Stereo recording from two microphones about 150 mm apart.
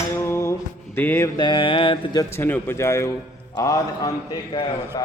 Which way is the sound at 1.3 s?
30° left (ahead or behind).